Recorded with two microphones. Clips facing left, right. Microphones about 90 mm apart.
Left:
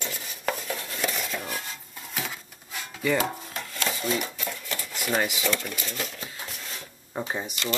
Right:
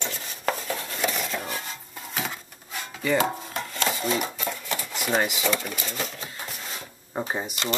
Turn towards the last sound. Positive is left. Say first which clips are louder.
# right 2 dB
turn(degrees=-20)  # may be behind; listen again after turning